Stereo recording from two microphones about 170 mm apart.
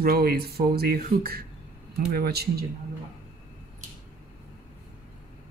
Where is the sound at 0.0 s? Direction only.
60° right (ahead or behind).